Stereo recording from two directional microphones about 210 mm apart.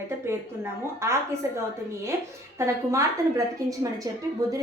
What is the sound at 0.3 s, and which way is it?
A woman's voice, 10° right (ahead or behind).